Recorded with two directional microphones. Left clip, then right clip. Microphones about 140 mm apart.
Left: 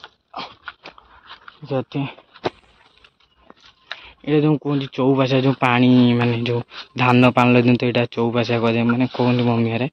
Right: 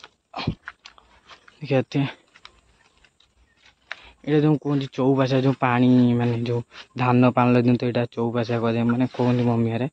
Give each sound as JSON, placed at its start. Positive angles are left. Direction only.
{"t": 1.6, "sound": "speech", "side_deg": -80}
{"t": 4.0, "sound": "a sound", "side_deg": -15}
{"t": 4.7, "sound": "speech", "side_deg": -10}